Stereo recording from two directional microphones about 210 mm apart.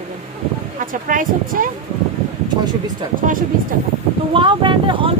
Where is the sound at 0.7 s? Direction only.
40° right (ahead or behind).